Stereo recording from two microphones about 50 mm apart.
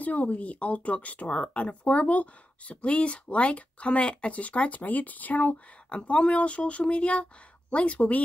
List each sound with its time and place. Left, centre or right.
0.0 s speech: left